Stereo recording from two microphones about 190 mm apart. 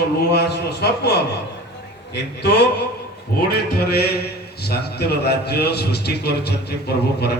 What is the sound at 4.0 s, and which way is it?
A man's voice, 55° left (ahead or behind).